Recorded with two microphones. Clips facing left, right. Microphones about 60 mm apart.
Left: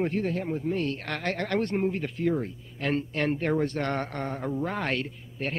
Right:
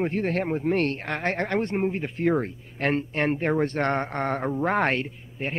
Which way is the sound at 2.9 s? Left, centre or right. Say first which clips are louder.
Even; right.